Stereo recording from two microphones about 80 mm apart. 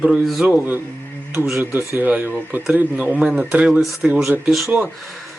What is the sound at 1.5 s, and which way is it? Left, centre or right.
Speech, right.